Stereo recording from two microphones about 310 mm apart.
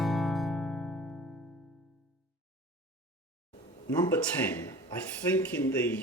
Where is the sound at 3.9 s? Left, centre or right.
Centre.